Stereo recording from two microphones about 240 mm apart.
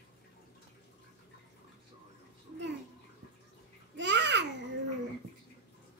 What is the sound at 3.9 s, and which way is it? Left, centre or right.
Babbling, right.